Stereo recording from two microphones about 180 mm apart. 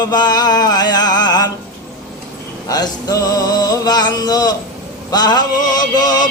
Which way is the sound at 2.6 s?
20° left (ahead or behind).